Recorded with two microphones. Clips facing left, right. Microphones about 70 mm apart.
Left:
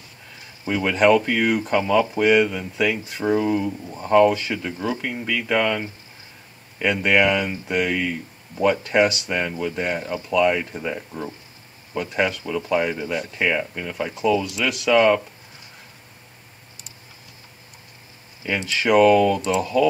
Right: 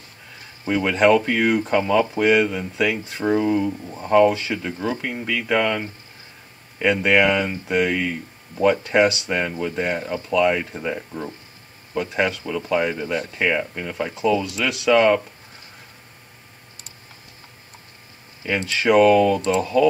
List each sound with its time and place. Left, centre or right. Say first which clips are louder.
0.7 s speech: right 1 dB; centre
18.6 s speech: right 1 dB; centre